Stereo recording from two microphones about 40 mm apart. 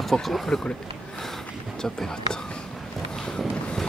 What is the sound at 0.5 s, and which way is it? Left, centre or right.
Speech, centre.